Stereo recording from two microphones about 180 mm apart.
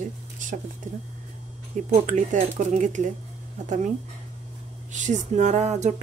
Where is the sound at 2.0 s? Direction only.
45° right (ahead or behind).